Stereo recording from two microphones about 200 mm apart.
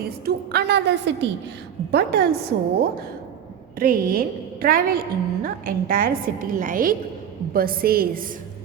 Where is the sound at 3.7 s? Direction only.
45° right (ahead or behind).